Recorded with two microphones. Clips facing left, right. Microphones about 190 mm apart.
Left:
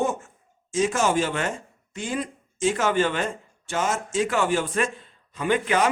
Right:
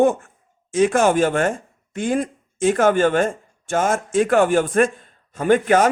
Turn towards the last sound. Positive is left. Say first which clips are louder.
# right 7 dB
turn(degrees=-45)  # may be behind; listen again after turning